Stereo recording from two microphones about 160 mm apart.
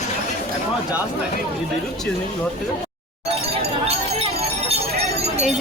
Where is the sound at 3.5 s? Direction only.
40° right (ahead or behind).